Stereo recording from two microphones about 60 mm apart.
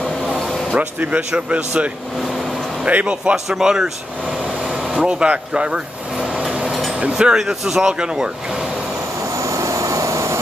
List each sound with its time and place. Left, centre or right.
0.3 s vehicle: centre
0.7 s speech: right
3.4 s speech: centre
6.7 s vehicle: centre
7.0 s speech: centre
9.4 s vehicle: right